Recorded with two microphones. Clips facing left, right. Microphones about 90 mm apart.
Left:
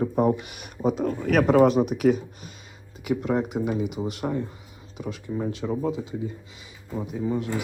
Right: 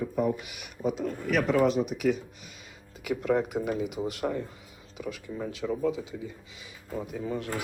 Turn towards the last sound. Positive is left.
turn(degrees=20)  # may be behind; listen again after turning